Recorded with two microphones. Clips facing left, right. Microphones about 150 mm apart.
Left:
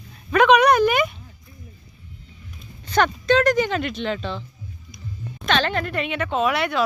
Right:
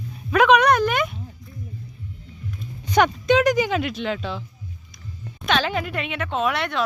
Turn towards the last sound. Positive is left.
turn(degrees=5)  # may be behind; listen again after turning